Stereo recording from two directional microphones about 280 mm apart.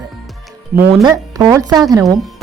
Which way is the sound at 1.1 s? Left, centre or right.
Centre.